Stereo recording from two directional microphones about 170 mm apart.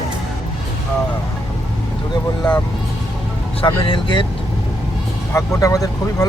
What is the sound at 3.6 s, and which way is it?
Speech, 30° left (ahead or behind).